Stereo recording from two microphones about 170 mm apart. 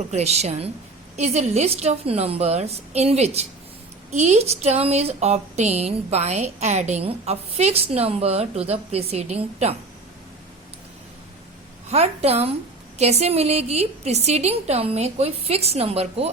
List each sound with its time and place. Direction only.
0.1 s a woman's voice: 40° right (ahead or behind)
11.9 s a woman's voice: 40° right (ahead or behind)